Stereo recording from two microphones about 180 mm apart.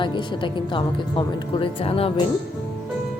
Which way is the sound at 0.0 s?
25° left (ahead or behind).